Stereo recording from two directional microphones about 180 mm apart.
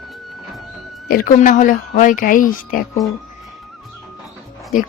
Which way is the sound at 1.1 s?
50° left (ahead or behind).